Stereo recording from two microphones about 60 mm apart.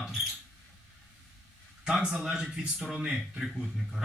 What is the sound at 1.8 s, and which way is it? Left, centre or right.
Speech, centre.